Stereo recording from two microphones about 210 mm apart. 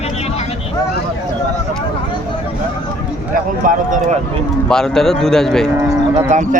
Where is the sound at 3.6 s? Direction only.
40° right (ahead or behind).